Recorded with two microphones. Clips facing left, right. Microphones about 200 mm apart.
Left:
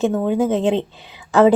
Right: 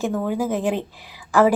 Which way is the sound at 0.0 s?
20° left (ahead or behind).